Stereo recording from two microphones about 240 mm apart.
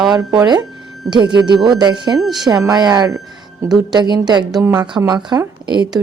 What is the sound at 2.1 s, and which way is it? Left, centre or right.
Speech, centre.